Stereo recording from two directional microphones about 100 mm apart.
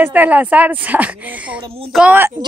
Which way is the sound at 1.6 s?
70° right (ahead or behind).